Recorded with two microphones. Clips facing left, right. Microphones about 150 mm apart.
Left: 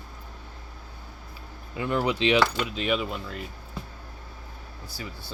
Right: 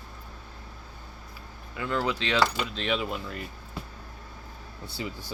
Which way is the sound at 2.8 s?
5° left (ahead or behind).